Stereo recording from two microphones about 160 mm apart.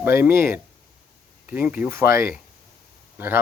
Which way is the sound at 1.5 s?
10° right (ahead or behind).